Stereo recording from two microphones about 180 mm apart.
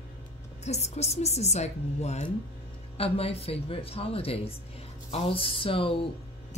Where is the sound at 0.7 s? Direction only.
40° left (ahead or behind).